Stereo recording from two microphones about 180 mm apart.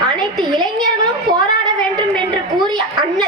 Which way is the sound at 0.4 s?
25° right (ahead or behind).